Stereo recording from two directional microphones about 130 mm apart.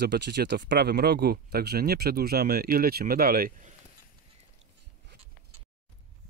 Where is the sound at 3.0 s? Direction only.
85° right.